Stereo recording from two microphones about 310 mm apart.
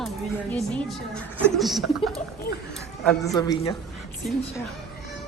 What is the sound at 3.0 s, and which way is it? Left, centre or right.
Speech, centre.